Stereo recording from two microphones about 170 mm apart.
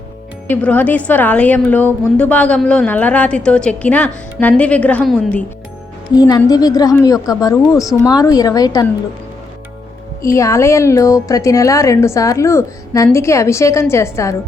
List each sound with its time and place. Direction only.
0.4 s a woman's voice: 10° left (ahead or behind)
6.1 s speech: 25° left (ahead or behind)
10.2 s a woman's voice: 15° left (ahead or behind)